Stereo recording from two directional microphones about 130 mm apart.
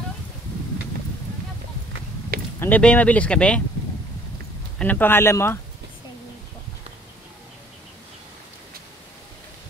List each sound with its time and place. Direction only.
2.6 s speech: 10° left (ahead or behind)
4.7 s speech: 15° left (ahead or behind)